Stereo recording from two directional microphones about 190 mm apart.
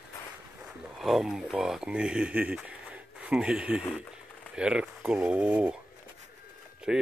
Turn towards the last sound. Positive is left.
turn(degrees=-5)  # may be behind; listen again after turning